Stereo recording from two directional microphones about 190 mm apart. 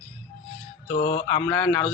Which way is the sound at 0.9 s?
60° left (ahead or behind).